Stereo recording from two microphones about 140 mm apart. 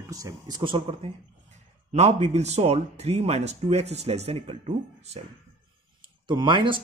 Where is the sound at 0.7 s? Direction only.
40° right (ahead or behind).